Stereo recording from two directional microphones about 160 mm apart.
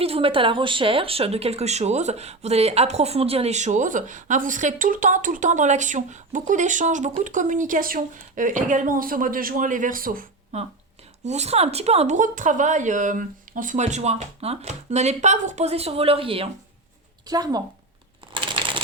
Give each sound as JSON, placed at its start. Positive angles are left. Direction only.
{"t": 0.0, "sound": "speech", "side_deg": -35}
{"t": 11.2, "sound": "speech", "side_deg": -45}
{"t": 17.2, "sound": "speech", "side_deg": -25}
{"t": 18.3, "sound": "a sound", "side_deg": -30}